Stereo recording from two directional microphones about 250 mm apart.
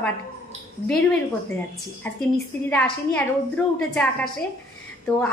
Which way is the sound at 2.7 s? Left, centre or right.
Centre.